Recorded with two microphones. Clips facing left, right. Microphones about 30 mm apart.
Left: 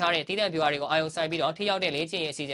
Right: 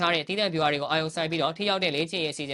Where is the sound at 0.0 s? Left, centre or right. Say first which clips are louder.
Right 1 dB; centre.